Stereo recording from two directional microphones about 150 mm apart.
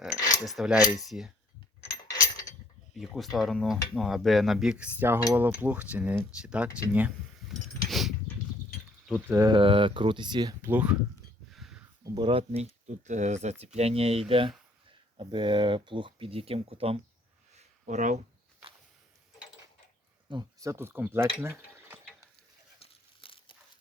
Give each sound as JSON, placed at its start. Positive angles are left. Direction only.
{"t": 0.4, "sound": "cutlery", "side_deg": 0}
{"t": 2.0, "sound": "mechanisms", "side_deg": 25}
{"t": 2.9, "sound": "speech", "side_deg": 0}
{"t": 3.3, "sound": "cutlery", "side_deg": 0}
{"t": 7.4, "sound": "a sound", "side_deg": 0}
{"t": 9.2, "sound": "cutlery", "side_deg": -15}
{"t": 9.5, "sound": "speech", "side_deg": -35}
{"t": 10.6, "sound": "cutlery", "side_deg": -10}
{"t": 11.5, "sound": "a sound", "side_deg": 0}
{"t": 12.1, "sound": "speech", "side_deg": -35}
{"t": 12.9, "sound": "speech", "side_deg": -50}
{"t": 17.5, "sound": "a sound", "side_deg": -50}
{"t": 20.3, "sound": "cutlery", "side_deg": -20}
{"t": 22.8, "sound": "crumpling", "side_deg": 35}